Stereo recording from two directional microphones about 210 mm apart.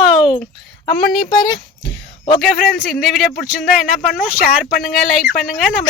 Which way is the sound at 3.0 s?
Centre (ahead or behind).